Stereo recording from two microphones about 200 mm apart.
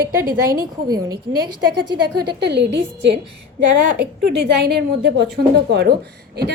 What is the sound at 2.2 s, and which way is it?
A woman's voice, 55° right (ahead or behind).